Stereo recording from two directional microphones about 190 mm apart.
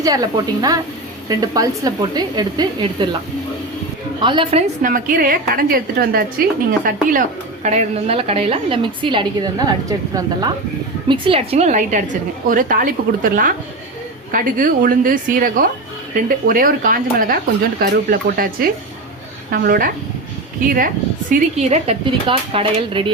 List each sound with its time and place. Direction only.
0.0 s a woman's voice: 20° right (ahead or behind)
4.2 s a woman's voice: 25° right (ahead or behind)
4.8 s a woman's voice: 45° right (ahead or behind); by 9.7 s 20° right (ahead or behind)
11.1 s a woman's voice: 30° right (ahead or behind)